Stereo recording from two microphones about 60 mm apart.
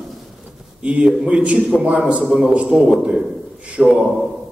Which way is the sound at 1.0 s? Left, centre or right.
Centre.